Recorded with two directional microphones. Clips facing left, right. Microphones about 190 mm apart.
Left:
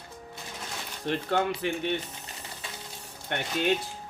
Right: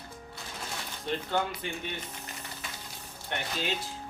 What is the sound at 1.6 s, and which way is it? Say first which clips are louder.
Mantra: left 7 dB; 70° left (ahead or behind).